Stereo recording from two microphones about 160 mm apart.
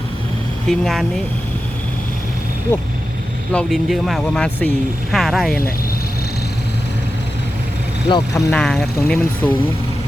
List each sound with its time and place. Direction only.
0.7 s speech: centre (ahead or behind)
3.5 s speech: centre (ahead or behind)
8.1 s speech: 20° left (ahead or behind)
8.5 s speech: 5° left (ahead or behind)